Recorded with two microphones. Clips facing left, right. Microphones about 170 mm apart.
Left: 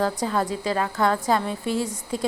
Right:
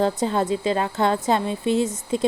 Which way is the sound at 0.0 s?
25° right (ahead or behind).